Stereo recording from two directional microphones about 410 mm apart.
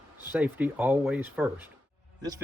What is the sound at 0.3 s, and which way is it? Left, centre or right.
Speech, centre.